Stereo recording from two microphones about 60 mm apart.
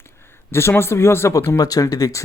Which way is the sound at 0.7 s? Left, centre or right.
Left.